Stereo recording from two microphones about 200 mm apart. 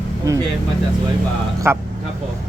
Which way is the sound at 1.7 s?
10° right (ahead or behind).